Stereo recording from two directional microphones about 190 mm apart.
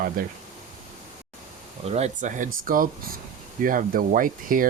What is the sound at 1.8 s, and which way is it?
Speech, 35° right (ahead or behind).